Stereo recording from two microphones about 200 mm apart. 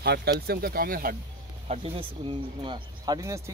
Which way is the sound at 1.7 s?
25° right (ahead or behind).